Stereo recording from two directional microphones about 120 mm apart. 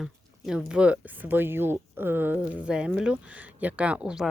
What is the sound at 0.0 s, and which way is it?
Speech, 5° right (ahead or behind).